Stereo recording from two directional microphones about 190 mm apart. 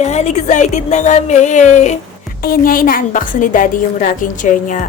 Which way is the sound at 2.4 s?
50° left (ahead or behind).